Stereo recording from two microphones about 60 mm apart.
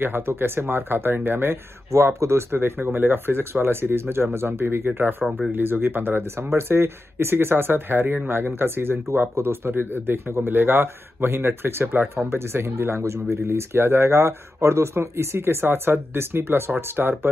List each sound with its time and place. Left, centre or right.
0.0 s speech: right
1.9 s speech: right